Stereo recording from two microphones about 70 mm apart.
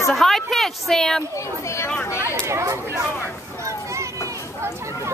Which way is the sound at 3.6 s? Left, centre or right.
Right.